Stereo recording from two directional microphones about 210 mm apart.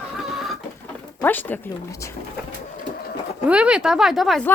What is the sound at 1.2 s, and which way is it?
Speech, 10° left (ahead or behind).